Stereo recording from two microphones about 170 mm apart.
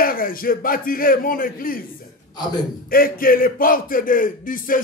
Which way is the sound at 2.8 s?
60° left (ahead or behind).